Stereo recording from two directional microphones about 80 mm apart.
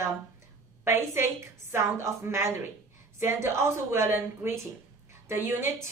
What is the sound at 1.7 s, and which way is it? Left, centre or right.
Speech, right.